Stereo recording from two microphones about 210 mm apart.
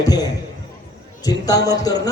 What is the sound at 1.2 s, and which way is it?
Speech, 20° left (ahead or behind).